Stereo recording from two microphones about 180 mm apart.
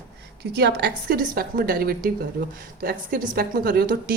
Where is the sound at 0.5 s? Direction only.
70° right (ahead or behind).